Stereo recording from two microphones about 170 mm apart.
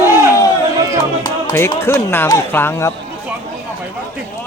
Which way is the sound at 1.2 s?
15° left (ahead or behind).